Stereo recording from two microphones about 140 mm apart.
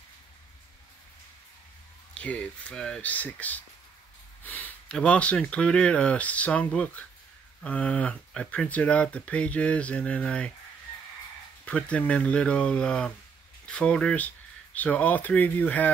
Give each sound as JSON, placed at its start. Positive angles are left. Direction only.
{"t": 2.1, "sound": "speech", "side_deg": 10}
{"t": 11.6, "sound": "speech", "side_deg": 10}